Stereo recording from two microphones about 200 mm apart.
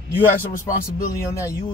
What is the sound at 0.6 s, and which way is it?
Speech, 15° left (ahead or behind).